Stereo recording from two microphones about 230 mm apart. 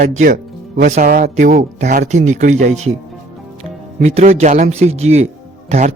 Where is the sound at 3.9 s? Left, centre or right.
Right.